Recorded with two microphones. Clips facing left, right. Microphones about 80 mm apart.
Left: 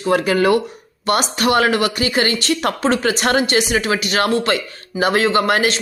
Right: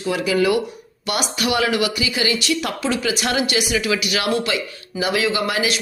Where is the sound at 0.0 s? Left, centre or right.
Left.